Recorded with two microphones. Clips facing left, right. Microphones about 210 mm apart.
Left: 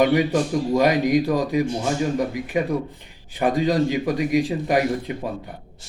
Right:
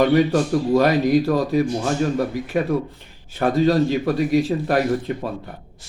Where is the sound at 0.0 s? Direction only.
15° left (ahead or behind).